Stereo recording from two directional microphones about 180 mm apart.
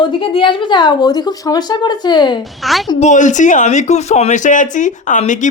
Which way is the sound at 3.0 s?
40° left (ahead or behind).